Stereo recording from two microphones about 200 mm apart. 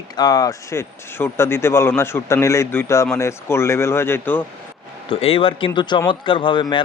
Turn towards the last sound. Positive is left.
turn(degrees=25)  # may be behind; listen again after turning